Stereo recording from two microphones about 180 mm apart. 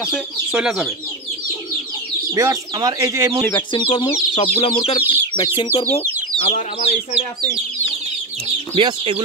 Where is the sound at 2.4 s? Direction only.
20° right (ahead or behind).